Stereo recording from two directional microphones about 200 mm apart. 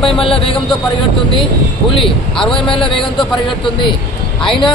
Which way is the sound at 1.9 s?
Centre (ahead or behind).